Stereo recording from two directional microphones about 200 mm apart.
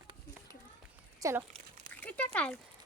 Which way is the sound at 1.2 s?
15° right (ahead or behind).